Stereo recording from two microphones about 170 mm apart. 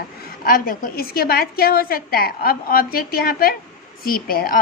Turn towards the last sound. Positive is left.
turn(degrees=60)  # may be behind; listen again after turning